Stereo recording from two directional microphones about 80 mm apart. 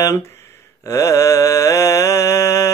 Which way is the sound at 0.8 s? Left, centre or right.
Left.